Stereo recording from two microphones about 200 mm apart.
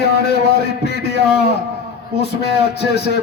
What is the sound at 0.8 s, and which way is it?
Speech, 55° left (ahead or behind).